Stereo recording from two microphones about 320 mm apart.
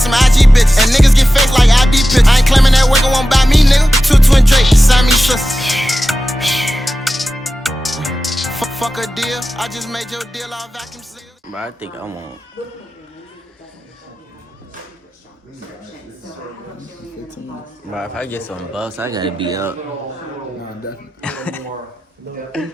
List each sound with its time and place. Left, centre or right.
0.0 s music: centre
11.5 s a man's voice: centre
17.9 s a man's voice: centre
21.2 s a man's voice: centre